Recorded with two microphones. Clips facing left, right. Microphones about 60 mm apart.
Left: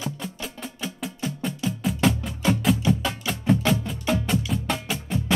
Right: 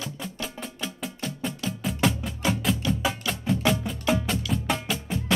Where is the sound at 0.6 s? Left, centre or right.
Centre.